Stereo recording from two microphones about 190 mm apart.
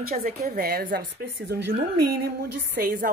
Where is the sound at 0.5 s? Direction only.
55° right (ahead or behind).